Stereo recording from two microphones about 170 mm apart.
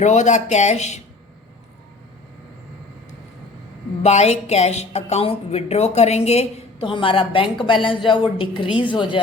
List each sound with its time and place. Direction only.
0.0 s speech: 45° left (ahead or behind)
4.0 s a woman's voice: 40° left (ahead or behind)